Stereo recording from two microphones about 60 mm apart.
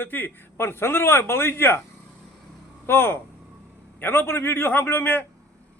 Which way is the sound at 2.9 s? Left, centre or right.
Left.